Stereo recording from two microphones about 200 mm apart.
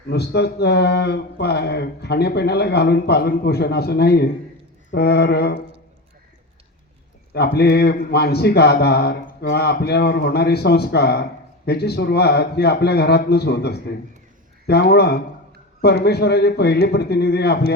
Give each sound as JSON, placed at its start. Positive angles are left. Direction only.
{"t": 0.1, "sound": "speech", "side_deg": 55}
{"t": 7.3, "sound": "a man's voice", "side_deg": 55}